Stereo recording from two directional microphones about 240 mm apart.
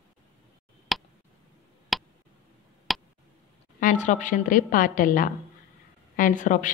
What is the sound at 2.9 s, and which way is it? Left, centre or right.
Tick, centre.